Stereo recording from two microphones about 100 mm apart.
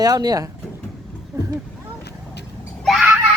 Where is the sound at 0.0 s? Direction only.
40° right (ahead or behind).